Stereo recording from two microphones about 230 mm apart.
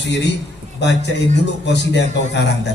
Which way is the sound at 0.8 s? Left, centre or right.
Left.